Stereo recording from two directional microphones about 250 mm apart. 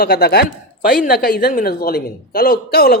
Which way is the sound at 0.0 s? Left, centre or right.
Left.